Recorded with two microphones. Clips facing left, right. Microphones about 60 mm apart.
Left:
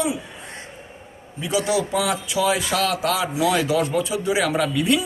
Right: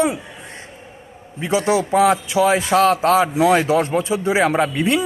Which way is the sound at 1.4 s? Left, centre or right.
Right.